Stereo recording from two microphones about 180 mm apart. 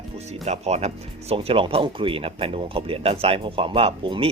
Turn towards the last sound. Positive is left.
turn(degrees=-30)  # may be behind; listen again after turning